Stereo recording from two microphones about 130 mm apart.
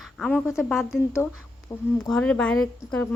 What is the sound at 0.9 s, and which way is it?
Speech, 20° left (ahead or behind).